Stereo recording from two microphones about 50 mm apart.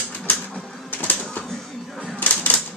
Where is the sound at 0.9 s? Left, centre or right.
Left.